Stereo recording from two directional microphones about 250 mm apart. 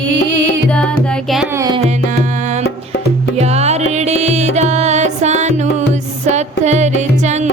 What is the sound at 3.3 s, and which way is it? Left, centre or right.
Music, right.